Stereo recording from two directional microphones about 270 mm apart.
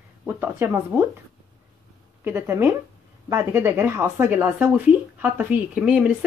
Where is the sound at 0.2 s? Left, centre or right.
Centre.